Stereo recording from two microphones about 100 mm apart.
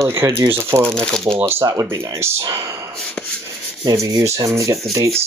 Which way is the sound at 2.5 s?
30° right (ahead or behind).